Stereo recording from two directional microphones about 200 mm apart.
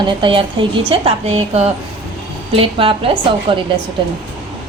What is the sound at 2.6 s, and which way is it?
A woman's voice, 25° right (ahead or behind).